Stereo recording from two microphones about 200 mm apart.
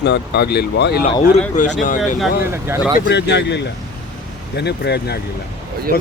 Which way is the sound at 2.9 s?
60° left (ahead or behind).